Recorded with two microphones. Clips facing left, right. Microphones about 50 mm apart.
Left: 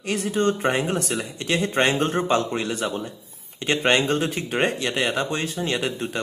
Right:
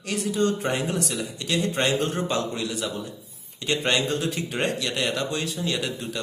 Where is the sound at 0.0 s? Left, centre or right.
Left.